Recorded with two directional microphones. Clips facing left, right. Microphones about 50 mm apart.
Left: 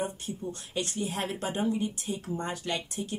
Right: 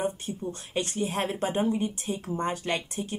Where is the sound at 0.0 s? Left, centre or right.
Right.